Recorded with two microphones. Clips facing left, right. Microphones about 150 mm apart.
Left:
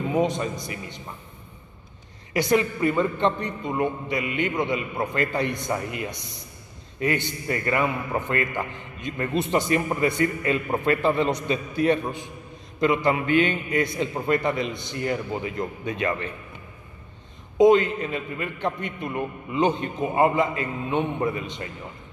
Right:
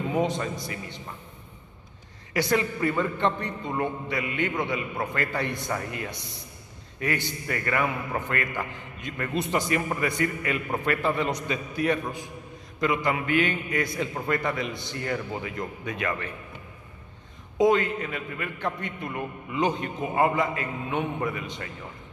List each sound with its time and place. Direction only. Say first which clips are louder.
0.1 s a man's voice: left 3 dB; 20° left (ahead or behind)
2.3 s a man's voice: left 3 dB; 20° left (ahead or behind)
17.6 s a man's voice: left 5 dB; 20° left (ahead or behind)